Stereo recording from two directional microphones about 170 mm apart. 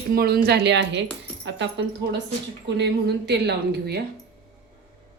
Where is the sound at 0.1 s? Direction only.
65° right (ahead or behind).